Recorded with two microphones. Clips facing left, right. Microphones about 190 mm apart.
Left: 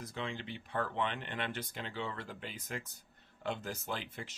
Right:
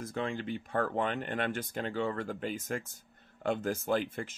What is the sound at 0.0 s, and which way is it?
Speech, 50° right (ahead or behind).